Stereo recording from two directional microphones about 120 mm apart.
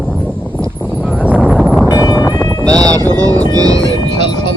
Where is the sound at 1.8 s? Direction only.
35° left (ahead or behind).